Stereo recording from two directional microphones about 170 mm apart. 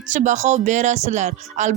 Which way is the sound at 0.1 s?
45° right (ahead or behind).